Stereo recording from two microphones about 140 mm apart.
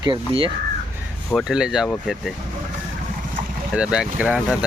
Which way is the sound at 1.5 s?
5° right (ahead or behind).